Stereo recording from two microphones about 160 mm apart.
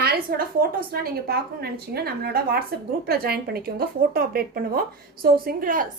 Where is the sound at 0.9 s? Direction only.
70° right (ahead or behind).